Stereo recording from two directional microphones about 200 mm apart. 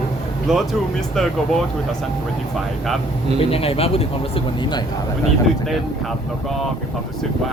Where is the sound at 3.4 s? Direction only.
30° left (ahead or behind).